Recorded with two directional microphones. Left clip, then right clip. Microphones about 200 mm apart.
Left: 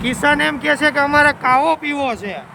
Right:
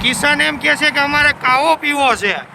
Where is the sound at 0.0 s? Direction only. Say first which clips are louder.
Right 2 dB; 20° left (ahead or behind); by 2.4 s centre (ahead or behind).